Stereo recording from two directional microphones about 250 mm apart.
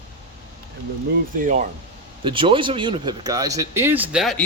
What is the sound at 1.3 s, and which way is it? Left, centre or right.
Speech, right.